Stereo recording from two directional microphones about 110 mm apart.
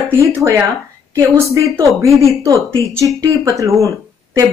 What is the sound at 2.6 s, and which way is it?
Speech, 30° right (ahead or behind).